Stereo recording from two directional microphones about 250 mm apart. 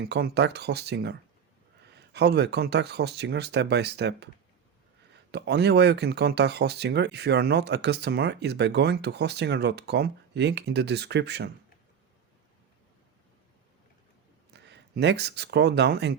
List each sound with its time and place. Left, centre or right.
0.0 s speech: right
5.3 s speech: right
14.5 s speech: right